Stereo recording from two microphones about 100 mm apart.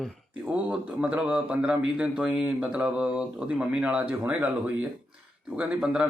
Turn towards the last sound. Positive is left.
turn(degrees=-10)  # may be behind; listen again after turning